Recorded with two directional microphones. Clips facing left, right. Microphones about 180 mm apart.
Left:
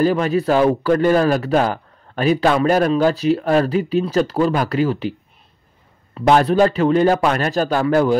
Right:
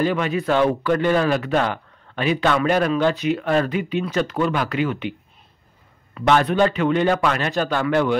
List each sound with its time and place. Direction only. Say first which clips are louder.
0.0 s a man's voice: left 4 dB; 40° left (ahead or behind)
6.1 s a man's voice: left 4 dB; 35° left (ahead or behind)